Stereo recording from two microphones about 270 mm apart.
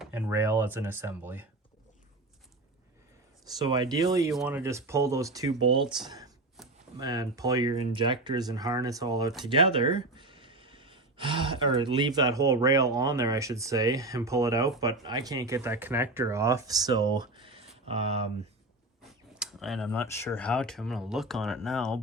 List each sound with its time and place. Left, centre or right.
0.0 s speech: centre
3.6 s speech: centre
6.6 s a sound: centre
7.0 s speech: centre
19.4 s speech: centre